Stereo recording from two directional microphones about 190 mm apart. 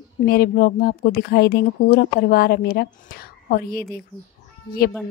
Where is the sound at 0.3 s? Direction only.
55° left (ahead or behind).